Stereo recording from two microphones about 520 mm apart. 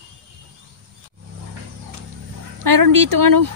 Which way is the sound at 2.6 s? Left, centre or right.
Right.